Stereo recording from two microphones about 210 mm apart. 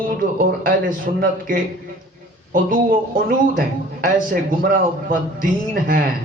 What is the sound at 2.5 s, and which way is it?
A woman's voice, 40° right (ahead or behind).